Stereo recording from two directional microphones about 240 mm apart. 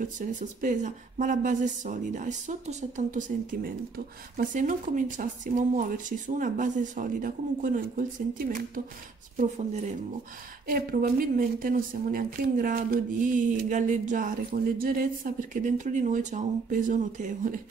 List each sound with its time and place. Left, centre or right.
0.0 s speech: right
10.7 s speech: right